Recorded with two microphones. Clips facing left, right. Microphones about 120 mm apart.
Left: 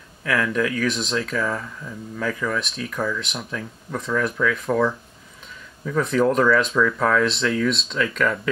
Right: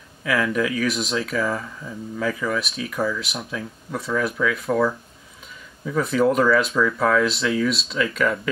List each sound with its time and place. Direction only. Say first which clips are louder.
0.2 s speech: even; 5° right (ahead or behind)